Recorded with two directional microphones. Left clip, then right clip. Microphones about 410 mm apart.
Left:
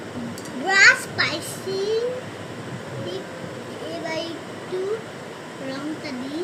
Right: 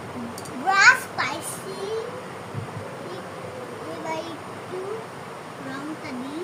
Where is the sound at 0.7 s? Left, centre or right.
Centre.